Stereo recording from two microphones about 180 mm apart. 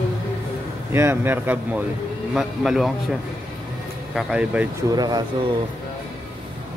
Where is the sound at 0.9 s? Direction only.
10° right (ahead or behind).